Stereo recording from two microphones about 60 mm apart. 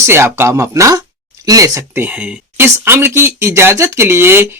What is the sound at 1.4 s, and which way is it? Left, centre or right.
Speech, right.